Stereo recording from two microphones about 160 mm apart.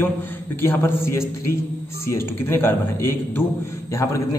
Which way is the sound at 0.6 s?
15° left (ahead or behind).